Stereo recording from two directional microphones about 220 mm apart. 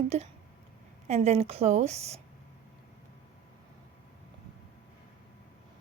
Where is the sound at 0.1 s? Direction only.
30° right (ahead or behind).